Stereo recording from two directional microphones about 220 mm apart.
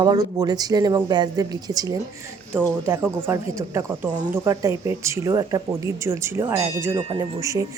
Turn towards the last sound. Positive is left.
turn(degrees=-15)  # may be behind; listen again after turning